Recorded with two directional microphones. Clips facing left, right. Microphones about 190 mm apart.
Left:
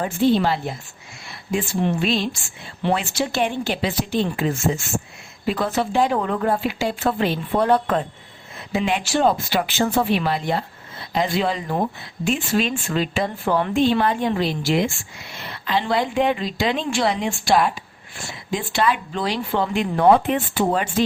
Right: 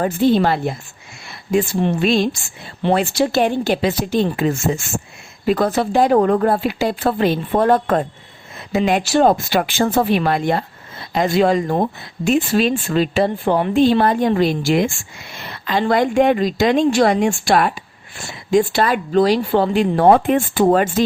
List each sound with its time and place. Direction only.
0.0 s speech: 50° right (ahead or behind)
2.0 s speech: 45° right (ahead or behind)
18.5 s speech: 40° right (ahead or behind)
20.1 s speech: 50° right (ahead or behind)